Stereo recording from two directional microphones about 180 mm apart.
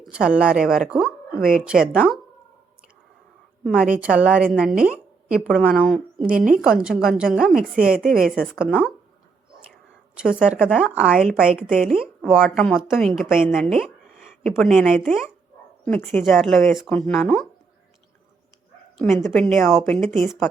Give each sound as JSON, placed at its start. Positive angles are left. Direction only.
{"t": 0.1, "sound": "a woman's voice", "side_deg": -5}
{"t": 1.4, "sound": "a woman's voice", "side_deg": -50}
{"t": 1.6, "sound": "a woman's voice", "side_deg": -5}
{"t": 3.6, "sound": "a woman's voice", "side_deg": 0}
{"t": 6.2, "sound": "a woman's voice", "side_deg": -50}
{"t": 6.5, "sound": "a woman's voice", "side_deg": -5}
{"t": 10.2, "sound": "a woman's voice", "side_deg": -5}
{"t": 19.3, "sound": "a woman's voice", "side_deg": 0}